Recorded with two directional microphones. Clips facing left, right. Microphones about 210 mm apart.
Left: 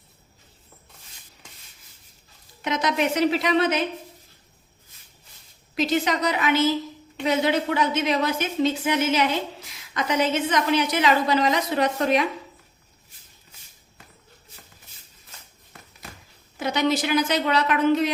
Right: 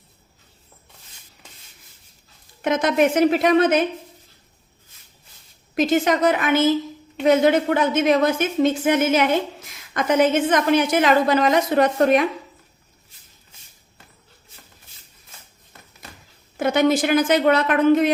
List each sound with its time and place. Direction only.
2.6 s a woman's voice: 50° right (ahead or behind)
5.7 s a woman's voice: 50° right (ahead or behind)
16.6 s a woman's voice: 50° right (ahead or behind)